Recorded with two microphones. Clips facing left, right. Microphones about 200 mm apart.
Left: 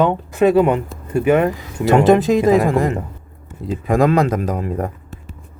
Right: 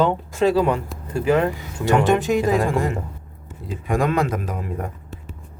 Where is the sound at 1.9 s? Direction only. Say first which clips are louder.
Left 6 dB; 35° left (ahead or behind).